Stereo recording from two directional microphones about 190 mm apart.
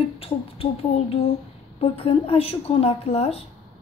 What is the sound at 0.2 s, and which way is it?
A woman's voice, 30° left (ahead or behind).